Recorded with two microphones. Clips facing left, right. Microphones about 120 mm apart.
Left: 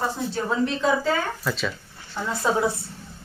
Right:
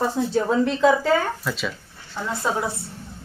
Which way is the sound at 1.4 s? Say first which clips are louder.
Even; 5° right (ahead or behind).